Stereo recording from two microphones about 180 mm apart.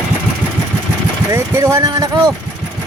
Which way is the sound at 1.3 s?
15° right (ahead or behind).